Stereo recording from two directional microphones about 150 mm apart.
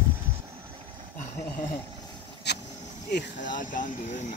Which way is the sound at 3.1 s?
75° left (ahead or behind).